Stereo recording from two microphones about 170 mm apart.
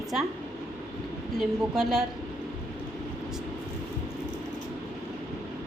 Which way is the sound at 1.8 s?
Centre (ahead or behind).